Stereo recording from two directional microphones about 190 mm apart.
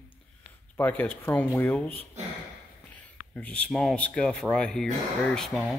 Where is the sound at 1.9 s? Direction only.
30° right (ahead or behind).